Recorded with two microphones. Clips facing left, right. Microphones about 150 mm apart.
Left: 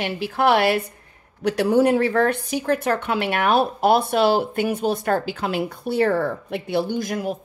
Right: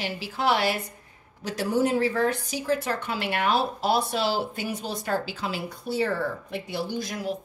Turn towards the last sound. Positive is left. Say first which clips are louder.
# left 5 dB
turn(degrees=55)  # may be behind; listen again after turning